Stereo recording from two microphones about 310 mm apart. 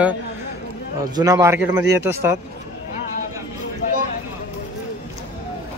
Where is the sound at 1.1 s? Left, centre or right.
Centre.